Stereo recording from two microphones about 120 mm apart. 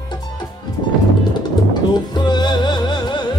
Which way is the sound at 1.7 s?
35° left (ahead or behind).